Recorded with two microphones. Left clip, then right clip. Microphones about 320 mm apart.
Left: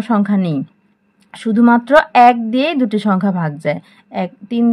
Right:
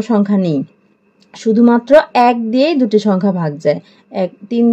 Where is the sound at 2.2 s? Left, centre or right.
Left.